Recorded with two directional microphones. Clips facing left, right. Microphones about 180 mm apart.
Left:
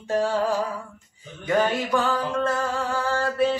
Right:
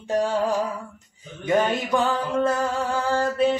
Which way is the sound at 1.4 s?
20° right (ahead or behind).